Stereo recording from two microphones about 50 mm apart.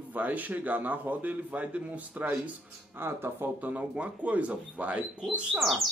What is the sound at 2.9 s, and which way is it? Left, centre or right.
Speech, right.